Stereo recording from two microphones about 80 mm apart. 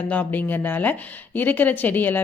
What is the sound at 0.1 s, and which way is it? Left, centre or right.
Speech, left.